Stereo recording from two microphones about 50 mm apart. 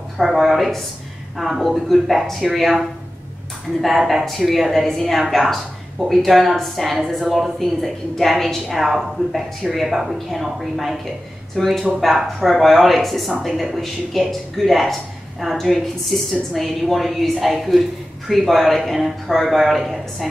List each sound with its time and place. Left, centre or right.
0.2 s a woman's voice: centre
4.1 s a woman's voice: centre